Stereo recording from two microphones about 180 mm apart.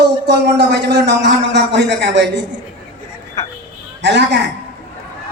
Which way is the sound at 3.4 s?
15° left (ahead or behind).